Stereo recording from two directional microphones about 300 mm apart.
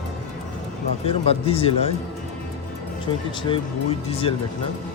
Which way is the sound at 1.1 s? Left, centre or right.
Centre.